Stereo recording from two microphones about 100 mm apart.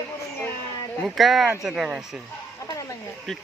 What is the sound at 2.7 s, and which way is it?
Speech, 35° left (ahead or behind).